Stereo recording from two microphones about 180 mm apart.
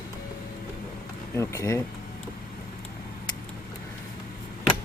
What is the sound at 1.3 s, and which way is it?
Speech, 15° left (ahead or behind).